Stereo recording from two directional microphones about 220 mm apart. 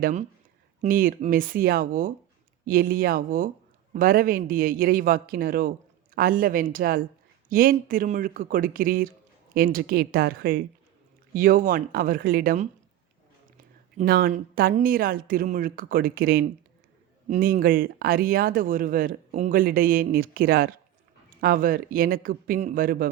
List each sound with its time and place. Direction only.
0.0 s a woman's voice: 35° right (ahead or behind)
14.0 s a woman's voice: 45° right (ahead or behind)